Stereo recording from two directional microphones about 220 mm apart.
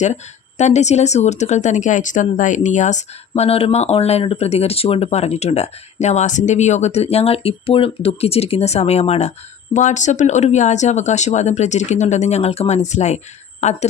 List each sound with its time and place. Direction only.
0.6 s speech: 30° left (ahead or behind)